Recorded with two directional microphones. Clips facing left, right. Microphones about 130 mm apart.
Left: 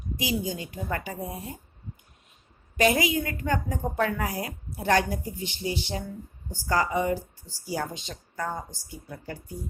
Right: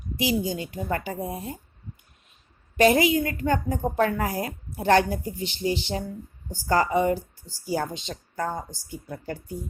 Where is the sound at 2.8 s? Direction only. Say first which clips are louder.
Right 4 dB; 35° right (ahead or behind).